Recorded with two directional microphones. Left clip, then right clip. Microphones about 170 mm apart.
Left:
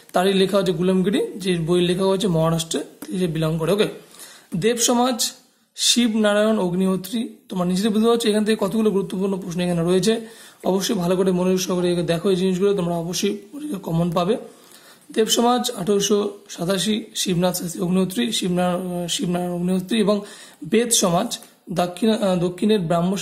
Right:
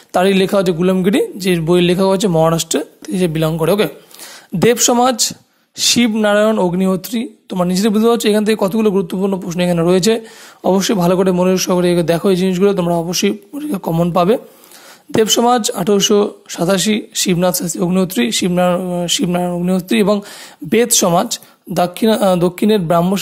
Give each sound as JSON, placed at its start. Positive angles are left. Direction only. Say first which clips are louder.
{"t": 0.1, "sound": "speech", "louder": "right 5 dB", "side_deg": -40}